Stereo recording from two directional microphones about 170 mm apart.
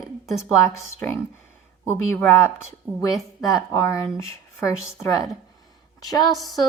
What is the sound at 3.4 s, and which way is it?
Speech, 20° left (ahead or behind).